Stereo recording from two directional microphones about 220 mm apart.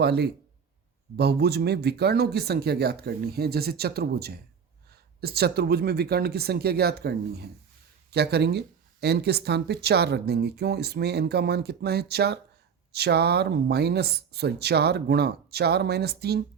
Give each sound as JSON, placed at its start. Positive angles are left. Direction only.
{"t": 0.0, "sound": "speech", "side_deg": -50}